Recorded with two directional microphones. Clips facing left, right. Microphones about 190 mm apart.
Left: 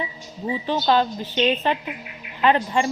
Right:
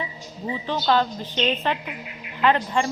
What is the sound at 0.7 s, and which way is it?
Speech, 15° left (ahead or behind).